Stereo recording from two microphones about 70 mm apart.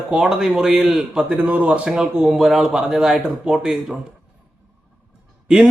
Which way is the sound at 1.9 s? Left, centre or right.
Centre.